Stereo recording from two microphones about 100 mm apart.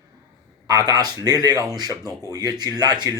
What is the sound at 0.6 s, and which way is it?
Speech, 40° right (ahead or behind).